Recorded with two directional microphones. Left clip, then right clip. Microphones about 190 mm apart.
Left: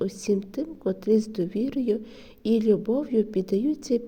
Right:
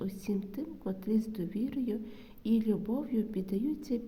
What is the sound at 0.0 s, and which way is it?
A woman's voice, 40° left (ahead or behind).